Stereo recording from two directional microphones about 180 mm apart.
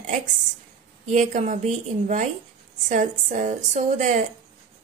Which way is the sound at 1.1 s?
40° right (ahead or behind).